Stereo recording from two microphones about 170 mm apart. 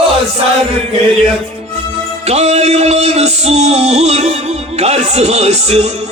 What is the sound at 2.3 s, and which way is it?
Music, 40° right (ahead or behind).